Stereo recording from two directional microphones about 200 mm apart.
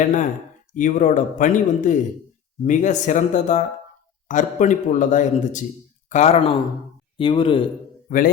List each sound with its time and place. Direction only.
0.7 s speech: 40° left (ahead or behind)
8.0 s speech: 45° left (ahead or behind)